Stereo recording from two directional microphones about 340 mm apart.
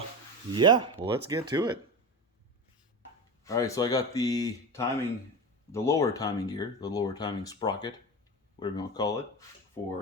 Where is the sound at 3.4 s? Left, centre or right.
Centre.